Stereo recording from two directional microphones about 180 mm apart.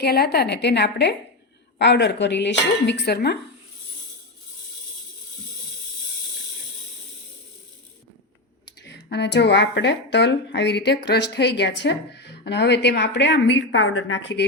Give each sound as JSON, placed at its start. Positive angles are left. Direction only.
{"t": 0.0, "sound": "a woman's voice", "side_deg": 60}
{"t": 8.8, "sound": "speech", "side_deg": 75}